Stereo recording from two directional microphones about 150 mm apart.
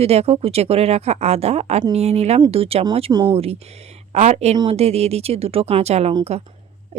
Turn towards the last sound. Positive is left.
turn(degrees=-45)  # may be behind; listen again after turning